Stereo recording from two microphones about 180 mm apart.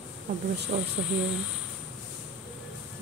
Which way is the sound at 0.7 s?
50° right (ahead or behind).